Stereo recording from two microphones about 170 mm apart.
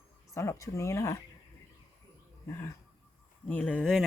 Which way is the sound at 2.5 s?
15° left (ahead or behind).